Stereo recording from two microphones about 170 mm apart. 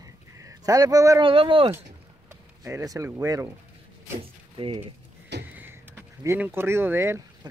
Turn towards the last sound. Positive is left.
turn(degrees=-15)  # may be behind; listen again after turning